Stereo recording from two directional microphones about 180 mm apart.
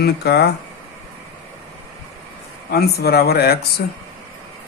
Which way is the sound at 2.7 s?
60° left (ahead or behind).